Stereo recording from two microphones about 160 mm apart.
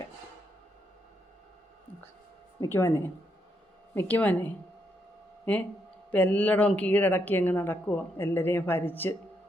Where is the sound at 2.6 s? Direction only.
15° left (ahead or behind).